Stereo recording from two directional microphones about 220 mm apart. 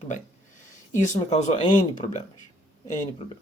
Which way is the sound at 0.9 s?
35° left (ahead or behind).